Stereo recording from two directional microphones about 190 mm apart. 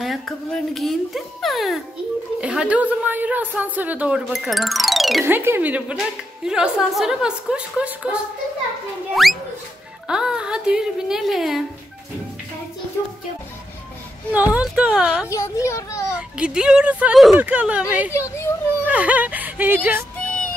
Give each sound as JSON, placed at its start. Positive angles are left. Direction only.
{"t": 0.0, "sound": "a woman's voice", "side_deg": 0}
{"t": 5.2, "sound": "a woman's voice", "side_deg": -10}
{"t": 14.3, "sound": "a woman's voice", "side_deg": -10}
{"t": 15.2, "sound": "a child's voice", "side_deg": 15}
{"t": 16.1, "sound": "a woman's voice", "side_deg": -5}
{"t": 18.1, "sound": "a sound", "side_deg": 15}
{"t": 18.9, "sound": "speech", "side_deg": -10}
{"t": 20.2, "sound": "music", "side_deg": 5}